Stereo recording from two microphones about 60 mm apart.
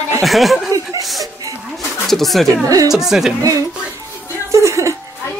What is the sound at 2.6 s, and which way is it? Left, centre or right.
Speech, right.